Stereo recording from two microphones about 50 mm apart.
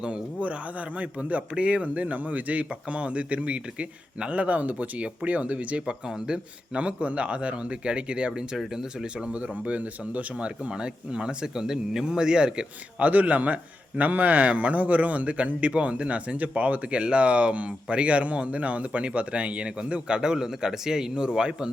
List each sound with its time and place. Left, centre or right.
0.0 s a man's voice: right
5.8 s speech: centre
6.7 s a man's voice: right; by 9.0 s centre
9.1 s a man's voice: right
13.1 s a man's voice: right